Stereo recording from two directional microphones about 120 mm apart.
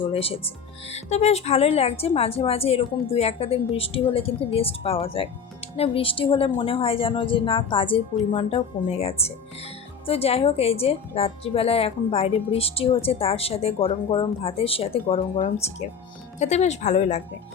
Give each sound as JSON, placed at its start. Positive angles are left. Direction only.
{"t": 0.0, "sound": "a woman's voice", "side_deg": 50}
{"t": 15.4, "sound": "speech", "side_deg": 65}